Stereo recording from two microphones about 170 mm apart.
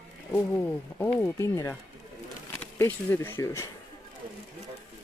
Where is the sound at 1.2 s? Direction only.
15° left (ahead or behind).